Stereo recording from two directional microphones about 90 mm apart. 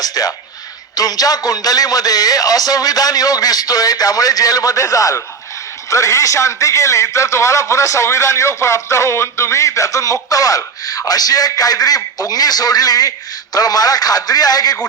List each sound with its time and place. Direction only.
0.0 s speech: 45° left (ahead or behind)